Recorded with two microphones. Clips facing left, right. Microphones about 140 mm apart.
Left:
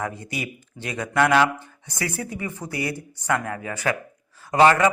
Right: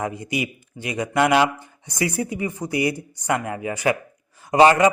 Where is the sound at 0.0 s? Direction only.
15° right (ahead or behind).